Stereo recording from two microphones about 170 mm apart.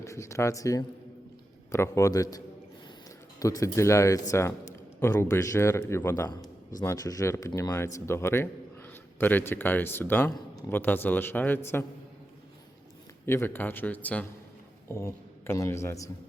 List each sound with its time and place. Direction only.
0.0 s a man's voice: 20° left (ahead or behind)
3.4 s speech: 20° left (ahead or behind)
13.2 s a man's voice: 15° left (ahead or behind)